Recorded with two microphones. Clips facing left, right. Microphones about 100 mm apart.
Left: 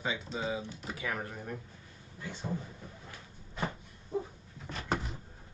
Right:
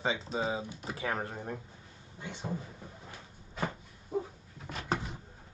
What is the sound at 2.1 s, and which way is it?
Speech, 20° right (ahead or behind).